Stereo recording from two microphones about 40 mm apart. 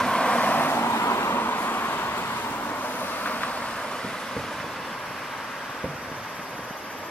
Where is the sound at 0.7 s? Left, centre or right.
Left.